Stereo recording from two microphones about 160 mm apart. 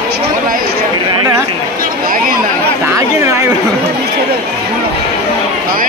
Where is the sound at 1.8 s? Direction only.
60° right (ahead or behind).